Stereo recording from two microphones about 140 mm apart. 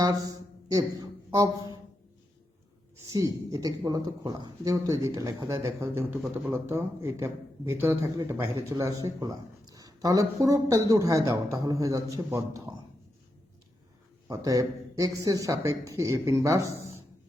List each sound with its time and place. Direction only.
0.0 s speech: 25° right (ahead or behind)
3.1 s speech: 25° right (ahead or behind)
6.1 s a man's voice: centre (ahead or behind)
6.5 s speech: 20° right (ahead or behind)
14.3 s speech: 25° right (ahead or behind)